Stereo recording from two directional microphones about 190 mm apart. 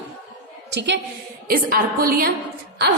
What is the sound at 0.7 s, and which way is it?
Speech, 65° right (ahead or behind).